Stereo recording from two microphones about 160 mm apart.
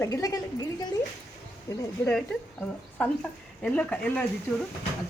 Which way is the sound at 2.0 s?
5° left (ahead or behind).